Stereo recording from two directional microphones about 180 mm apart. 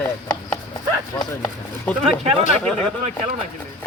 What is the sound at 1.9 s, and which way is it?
Speech, 10° left (ahead or behind).